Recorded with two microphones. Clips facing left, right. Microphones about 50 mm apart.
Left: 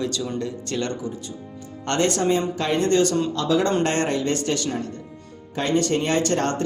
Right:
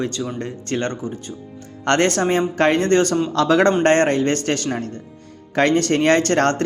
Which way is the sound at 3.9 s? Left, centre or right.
Right.